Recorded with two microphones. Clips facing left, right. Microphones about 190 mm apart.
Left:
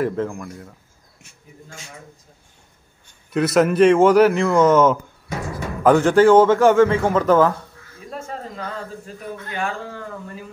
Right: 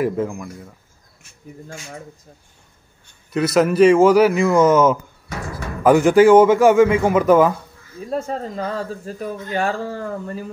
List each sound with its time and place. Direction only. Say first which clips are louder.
0.0 s a man's voice: right 1 dB; 10° right (ahead or behind)
3.3 s a man's voice: right 1 dB; centre (ahead or behind)
8.1 s speech: right 7 dB; 35° right (ahead or behind)